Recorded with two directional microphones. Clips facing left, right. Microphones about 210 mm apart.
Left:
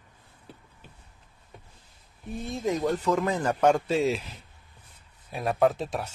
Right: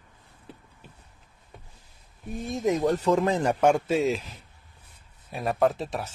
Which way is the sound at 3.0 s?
35° right (ahead or behind).